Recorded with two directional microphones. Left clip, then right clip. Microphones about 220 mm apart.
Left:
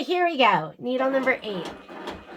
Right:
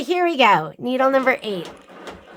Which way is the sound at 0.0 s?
50° right (ahead or behind).